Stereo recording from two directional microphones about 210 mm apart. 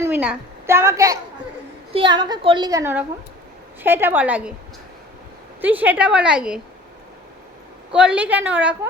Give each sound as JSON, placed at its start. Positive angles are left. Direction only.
{"t": 0.0, "sound": "a woman's voice", "side_deg": -10}
{"t": 5.6, "sound": "a woman's voice", "side_deg": -10}
{"t": 7.9, "sound": "a woman's voice", "side_deg": -5}